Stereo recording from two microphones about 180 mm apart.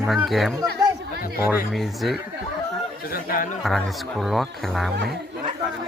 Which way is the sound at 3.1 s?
50° left (ahead or behind).